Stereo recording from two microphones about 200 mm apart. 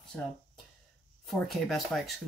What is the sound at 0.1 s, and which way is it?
Speech, 5° left (ahead or behind).